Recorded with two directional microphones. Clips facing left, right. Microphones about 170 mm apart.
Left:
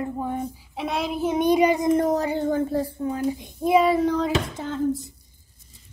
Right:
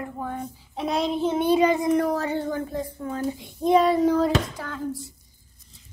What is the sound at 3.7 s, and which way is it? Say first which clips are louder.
Child singing: even; centre (ahead or behind).